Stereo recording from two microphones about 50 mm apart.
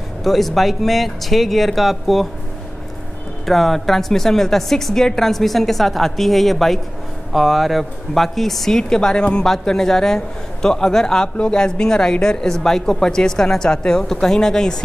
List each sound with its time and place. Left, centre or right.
0.2 s a woman's voice: centre
3.4 s a woman's voice: centre